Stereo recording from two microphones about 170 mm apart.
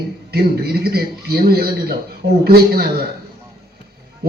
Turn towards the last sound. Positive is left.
turn(degrees=-70)  # may be behind; listen again after turning